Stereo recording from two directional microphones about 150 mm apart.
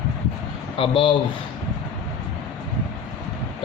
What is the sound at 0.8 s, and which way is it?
Speech, 35° left (ahead or behind).